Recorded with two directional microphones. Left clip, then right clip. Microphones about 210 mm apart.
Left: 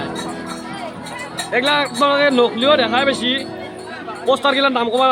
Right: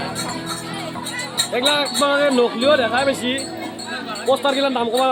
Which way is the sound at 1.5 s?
15° left (ahead or behind).